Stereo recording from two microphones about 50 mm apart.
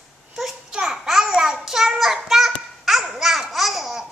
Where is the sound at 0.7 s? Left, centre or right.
Centre.